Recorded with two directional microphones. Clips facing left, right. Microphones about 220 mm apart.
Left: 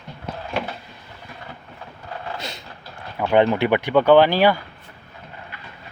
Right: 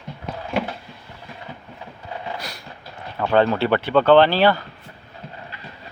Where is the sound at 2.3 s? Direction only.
25° left (ahead or behind).